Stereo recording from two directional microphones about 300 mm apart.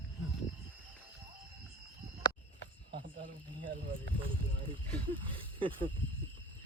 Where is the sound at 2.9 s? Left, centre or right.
Right.